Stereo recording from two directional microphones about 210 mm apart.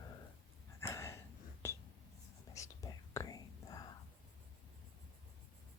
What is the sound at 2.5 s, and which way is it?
Whispering, 15° left (ahead or behind).